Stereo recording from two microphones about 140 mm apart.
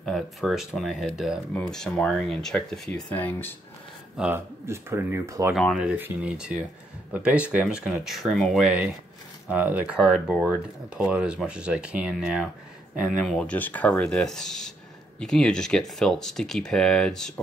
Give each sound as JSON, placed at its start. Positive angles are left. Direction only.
{"t": 0.0, "sound": "speech", "side_deg": 0}
{"t": 1.5, "sound": "speech", "side_deg": 5}
{"t": 4.2, "sound": "speech", "side_deg": -15}
{"t": 13.2, "sound": "speech", "side_deg": 5}